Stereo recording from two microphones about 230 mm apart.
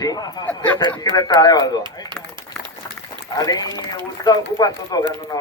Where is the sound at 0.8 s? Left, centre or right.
Centre.